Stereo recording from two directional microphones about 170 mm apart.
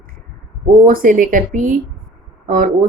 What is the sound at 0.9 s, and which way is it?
Speech, 55° right (ahead or behind).